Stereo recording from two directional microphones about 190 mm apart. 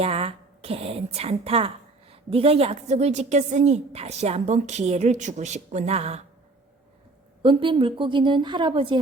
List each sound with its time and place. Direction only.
0.0 s a woman's voice: 30° right (ahead or behind)
7.4 s a woman's voice: 25° right (ahead or behind)